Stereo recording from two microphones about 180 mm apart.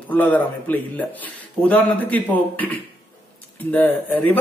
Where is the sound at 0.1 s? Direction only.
10° left (ahead or behind).